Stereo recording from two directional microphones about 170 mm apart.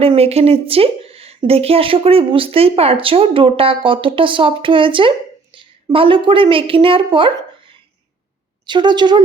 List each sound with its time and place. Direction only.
0.0 s a woman's voice: 35° right (ahead or behind)